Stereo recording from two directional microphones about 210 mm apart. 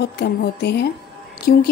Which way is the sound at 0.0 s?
50° left (ahead or behind).